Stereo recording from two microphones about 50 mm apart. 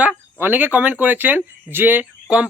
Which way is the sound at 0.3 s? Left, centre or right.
Right.